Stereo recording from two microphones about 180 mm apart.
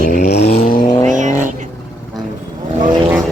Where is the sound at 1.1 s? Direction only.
45° right (ahead or behind).